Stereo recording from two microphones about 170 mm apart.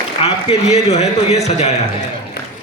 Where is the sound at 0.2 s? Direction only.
35° left (ahead or behind).